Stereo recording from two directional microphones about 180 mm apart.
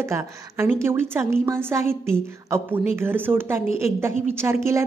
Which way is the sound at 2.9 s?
10° right (ahead or behind).